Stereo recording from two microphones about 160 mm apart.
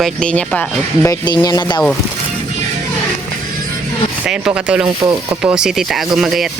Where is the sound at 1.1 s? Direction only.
25° left (ahead or behind).